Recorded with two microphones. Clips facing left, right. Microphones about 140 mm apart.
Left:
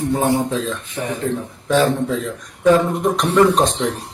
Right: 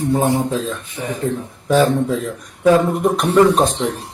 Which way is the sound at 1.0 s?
60° left (ahead or behind).